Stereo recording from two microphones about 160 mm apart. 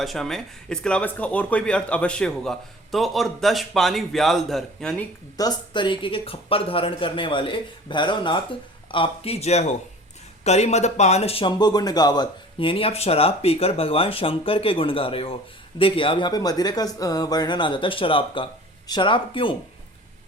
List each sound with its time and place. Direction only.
0.0 s speech: centre (ahead or behind)
5.4 s speech: 25° left (ahead or behind)